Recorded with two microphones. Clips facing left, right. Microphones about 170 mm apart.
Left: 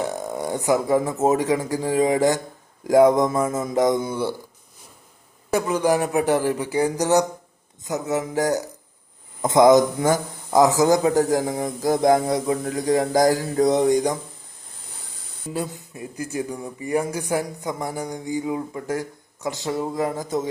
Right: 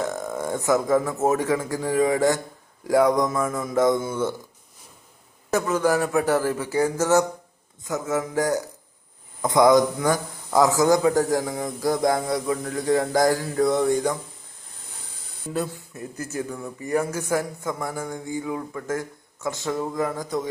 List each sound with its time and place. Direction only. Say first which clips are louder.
0.3 s a man's voice: left 1 dB; 15° left (ahead or behind)
5.5 s a man's voice: left 1 dB; 15° left (ahead or behind)
9.4 s a man's voice: left 2 dB; 20° left (ahead or behind)
15.5 s a man's voice: right 1 dB; 15° left (ahead or behind)